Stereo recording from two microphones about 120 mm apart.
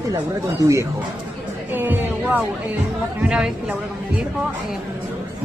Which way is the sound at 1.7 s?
15° right (ahead or behind).